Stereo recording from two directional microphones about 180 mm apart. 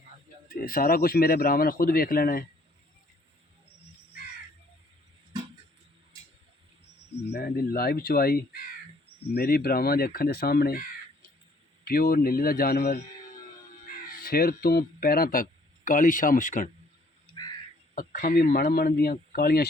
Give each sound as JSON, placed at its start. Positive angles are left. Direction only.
{"t": 0.6, "sound": "speech", "side_deg": 55}
{"t": 7.3, "sound": "speech", "side_deg": 55}
{"t": 11.9, "sound": "speech", "side_deg": 55}
{"t": 14.3, "sound": "speech", "side_deg": 55}
{"t": 17.9, "sound": "speech", "side_deg": 50}